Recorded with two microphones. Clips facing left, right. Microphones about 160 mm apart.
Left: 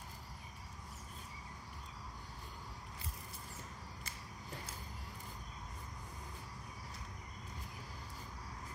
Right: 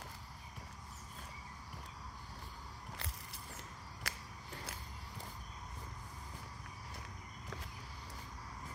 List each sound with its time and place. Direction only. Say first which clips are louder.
4.1 s walk: right 4 dB; 75° right (ahead or behind)